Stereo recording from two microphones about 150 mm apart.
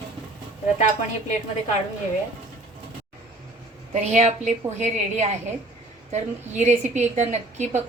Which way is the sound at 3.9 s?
50° right (ahead or behind).